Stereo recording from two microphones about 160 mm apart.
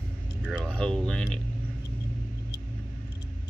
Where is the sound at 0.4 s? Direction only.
Centre (ahead or behind).